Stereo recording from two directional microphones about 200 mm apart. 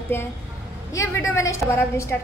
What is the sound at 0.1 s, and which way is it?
A woman's voice, 10° left (ahead or behind).